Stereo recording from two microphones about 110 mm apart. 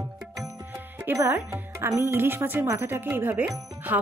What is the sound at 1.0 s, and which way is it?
Speech, 20° right (ahead or behind).